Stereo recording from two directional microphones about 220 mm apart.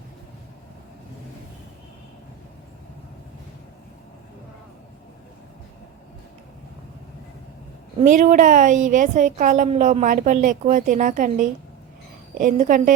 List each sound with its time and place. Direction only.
7.9 s a woman's voice: 35° right (ahead or behind)